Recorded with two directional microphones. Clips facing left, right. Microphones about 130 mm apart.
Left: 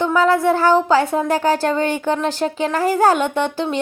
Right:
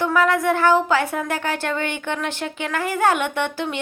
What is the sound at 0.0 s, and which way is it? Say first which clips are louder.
Speech: left 3 dB; 30° left (ahead or behind).